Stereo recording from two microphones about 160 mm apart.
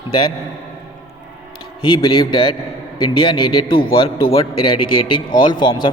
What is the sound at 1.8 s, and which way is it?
A man's voice, 35° left (ahead or behind).